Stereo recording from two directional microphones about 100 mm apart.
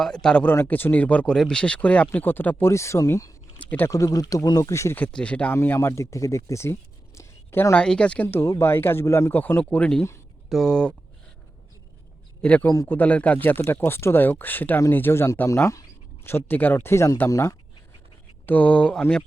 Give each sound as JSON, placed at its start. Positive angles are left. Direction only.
{"t": 0.0, "sound": "speech", "side_deg": 5}
{"t": 0.5, "sound": "speech", "side_deg": 25}
{"t": 3.6, "sound": "a sound", "side_deg": 15}
{"t": 3.8, "sound": "speech", "side_deg": 35}
{"t": 4.9, "sound": "speech", "side_deg": 15}
{"t": 5.5, "sound": "speech", "side_deg": 25}
{"t": 7.8, "sound": "speech", "side_deg": 10}
{"t": 12.4, "sound": "speech", "side_deg": 15}
{"t": 18.4, "sound": "speech", "side_deg": 15}